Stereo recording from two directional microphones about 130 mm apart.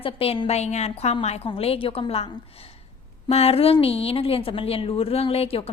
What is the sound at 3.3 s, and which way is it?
A woman's voice, 50° left (ahead or behind).